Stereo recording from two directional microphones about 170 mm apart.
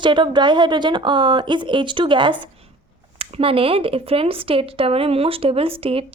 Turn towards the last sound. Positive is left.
turn(degrees=-35)  # may be behind; listen again after turning